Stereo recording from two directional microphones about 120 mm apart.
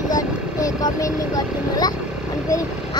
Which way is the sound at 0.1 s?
30° left (ahead or behind).